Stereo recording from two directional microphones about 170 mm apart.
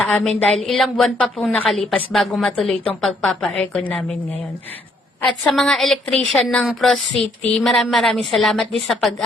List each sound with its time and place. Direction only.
0.0 s a woman's voice: centre (ahead or behind)
5.4 s a woman's voice: 5° left (ahead or behind)